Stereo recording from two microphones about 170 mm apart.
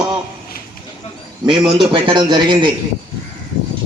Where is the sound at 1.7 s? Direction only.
30° right (ahead or behind).